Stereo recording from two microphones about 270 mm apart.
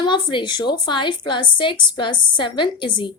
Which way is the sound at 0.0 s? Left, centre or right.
Centre.